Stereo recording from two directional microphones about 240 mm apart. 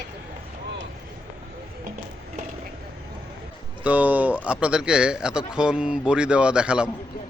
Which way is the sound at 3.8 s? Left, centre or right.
Centre.